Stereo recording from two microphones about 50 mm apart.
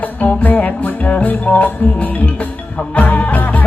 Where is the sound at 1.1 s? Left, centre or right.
Left.